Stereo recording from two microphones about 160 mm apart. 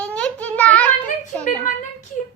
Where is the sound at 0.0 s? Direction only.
5° left (ahead or behind).